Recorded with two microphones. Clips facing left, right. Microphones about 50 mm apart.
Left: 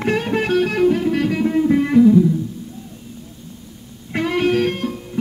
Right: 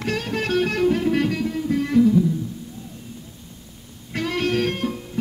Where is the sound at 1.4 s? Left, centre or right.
Left.